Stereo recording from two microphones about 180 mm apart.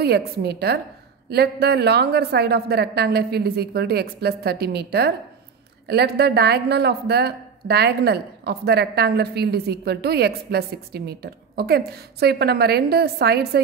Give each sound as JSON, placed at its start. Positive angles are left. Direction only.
{"t": 0.0, "sound": "a woman's voice", "side_deg": -65}